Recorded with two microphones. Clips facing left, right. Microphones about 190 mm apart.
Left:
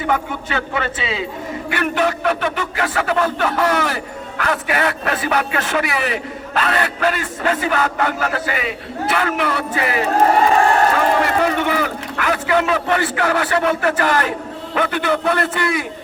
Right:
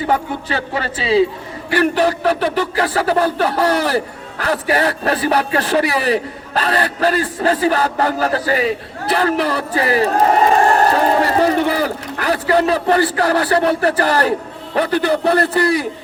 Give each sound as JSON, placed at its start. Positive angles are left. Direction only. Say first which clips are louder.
{"t": 0.1, "sound": "a man's voice", "louder": "right 1 dB", "side_deg": -35}